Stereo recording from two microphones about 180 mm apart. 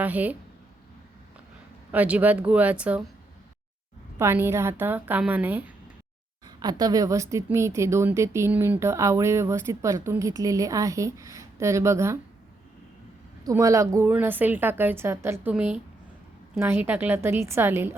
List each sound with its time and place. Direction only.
0.0 s a woman's voice: 10° right (ahead or behind)
1.9 s a woman's voice: 10° right (ahead or behind)
4.2 s a woman's voice: 15° right (ahead or behind)
6.6 s a woman's voice: 20° right (ahead or behind)
13.4 s a woman's voice: 20° right (ahead or behind)